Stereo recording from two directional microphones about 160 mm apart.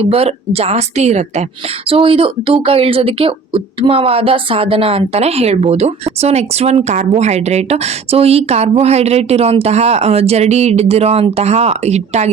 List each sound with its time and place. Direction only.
0.0 s speech: 40° right (ahead or behind)